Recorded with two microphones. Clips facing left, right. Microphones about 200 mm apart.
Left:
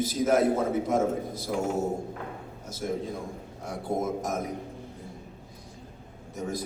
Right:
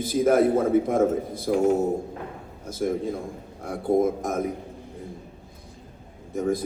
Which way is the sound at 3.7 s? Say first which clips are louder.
Right 8 dB; 55° right (ahead or behind).